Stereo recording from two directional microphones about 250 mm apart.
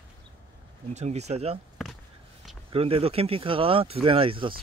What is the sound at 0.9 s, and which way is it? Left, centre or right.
Speech, right.